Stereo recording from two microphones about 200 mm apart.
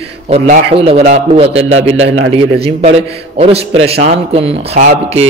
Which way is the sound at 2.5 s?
30° right (ahead or behind).